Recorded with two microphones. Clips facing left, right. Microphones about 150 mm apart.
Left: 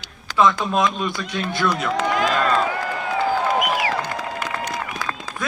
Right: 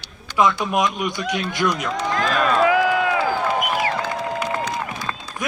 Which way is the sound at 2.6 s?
90° right.